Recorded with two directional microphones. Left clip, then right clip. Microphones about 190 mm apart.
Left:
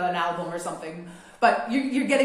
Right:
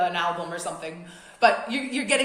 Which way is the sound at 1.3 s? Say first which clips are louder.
Even; 40° right (ahead or behind).